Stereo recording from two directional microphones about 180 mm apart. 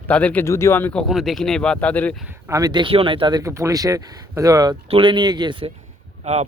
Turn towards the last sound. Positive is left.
turn(degrees=-40)  # may be behind; listen again after turning